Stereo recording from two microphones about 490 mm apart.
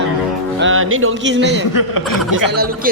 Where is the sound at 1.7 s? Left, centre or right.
Left.